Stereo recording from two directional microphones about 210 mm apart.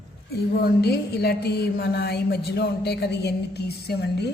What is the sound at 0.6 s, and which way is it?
A woman's voice, 50° left (ahead or behind).